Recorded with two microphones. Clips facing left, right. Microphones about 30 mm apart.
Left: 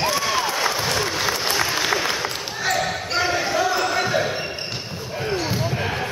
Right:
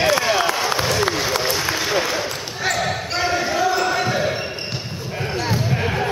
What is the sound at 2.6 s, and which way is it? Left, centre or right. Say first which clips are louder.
Basketball bounce: right 1 dB; centre.